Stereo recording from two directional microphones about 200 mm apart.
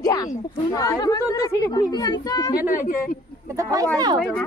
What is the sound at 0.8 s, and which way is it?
A woman's voice, 15° left (ahead or behind).